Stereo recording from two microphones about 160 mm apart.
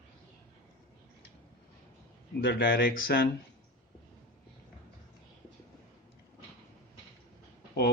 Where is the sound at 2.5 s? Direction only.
70° left (ahead or behind).